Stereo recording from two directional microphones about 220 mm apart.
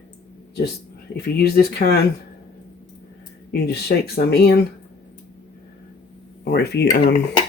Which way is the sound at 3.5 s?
45° left (ahead or behind).